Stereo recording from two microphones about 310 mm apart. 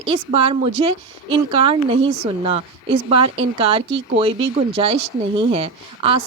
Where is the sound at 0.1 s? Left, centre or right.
Centre.